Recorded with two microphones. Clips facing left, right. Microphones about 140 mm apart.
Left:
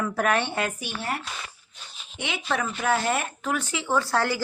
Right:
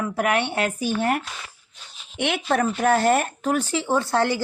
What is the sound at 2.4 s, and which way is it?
Speech, 45° right (ahead or behind).